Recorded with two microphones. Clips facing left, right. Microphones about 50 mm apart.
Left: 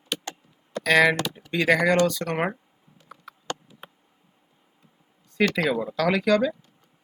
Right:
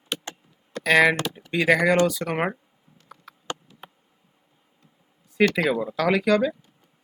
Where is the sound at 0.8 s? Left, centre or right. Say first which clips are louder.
Right 1 dB; centre.